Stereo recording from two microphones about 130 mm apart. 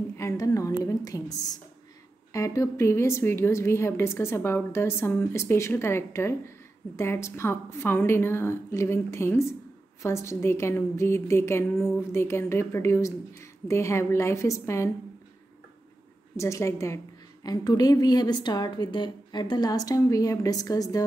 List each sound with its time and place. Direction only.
0.2 s a sound: 25° left (ahead or behind)
0.8 s a woman's voice: 25° left (ahead or behind)
16.3 s a woman's voice: 25° left (ahead or behind)